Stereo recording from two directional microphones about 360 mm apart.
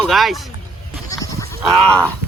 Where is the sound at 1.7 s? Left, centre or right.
Centre.